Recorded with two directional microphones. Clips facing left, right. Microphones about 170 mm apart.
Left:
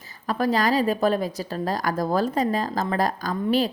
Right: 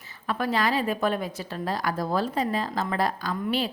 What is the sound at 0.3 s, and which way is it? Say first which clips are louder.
A woman's voice: left 4 dB; 40° left (ahead or behind).